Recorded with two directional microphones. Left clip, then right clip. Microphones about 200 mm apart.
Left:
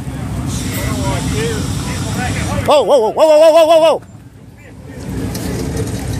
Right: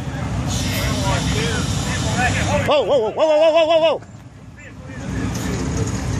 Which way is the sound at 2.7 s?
35° left (ahead or behind).